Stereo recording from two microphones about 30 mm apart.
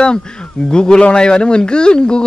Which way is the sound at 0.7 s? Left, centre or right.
Left.